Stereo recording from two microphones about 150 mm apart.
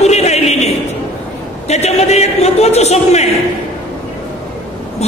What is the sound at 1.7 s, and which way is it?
Speech, 45° left (ahead or behind).